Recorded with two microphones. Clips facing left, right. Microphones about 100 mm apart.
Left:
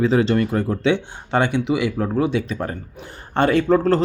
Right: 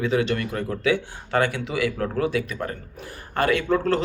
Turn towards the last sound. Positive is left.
turn(degrees=40)  # may be behind; listen again after turning